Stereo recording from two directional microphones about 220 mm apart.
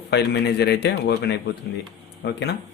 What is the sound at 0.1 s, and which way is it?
Speech, 50° left (ahead or behind).